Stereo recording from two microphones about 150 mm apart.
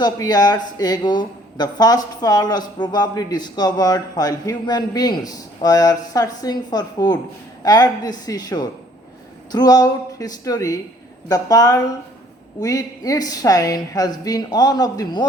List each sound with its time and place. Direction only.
0.0 s speech: 25° left (ahead or behind)